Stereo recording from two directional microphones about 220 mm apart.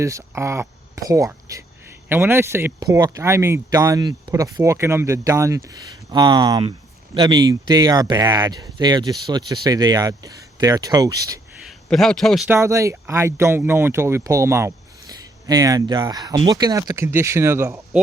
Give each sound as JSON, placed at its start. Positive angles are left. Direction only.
{"t": 0.0, "sound": "speech", "side_deg": -15}
{"t": 11.9, "sound": "a man's voice", "side_deg": 0}
{"t": 12.5, "sound": "speech", "side_deg": -10}